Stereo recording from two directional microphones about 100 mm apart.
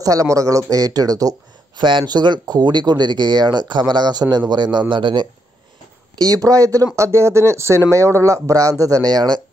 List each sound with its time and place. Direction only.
0.0 s speech: 35° right (ahead or behind)
1.8 s speech: 50° right (ahead or behind)
6.2 s speech: 35° right (ahead or behind)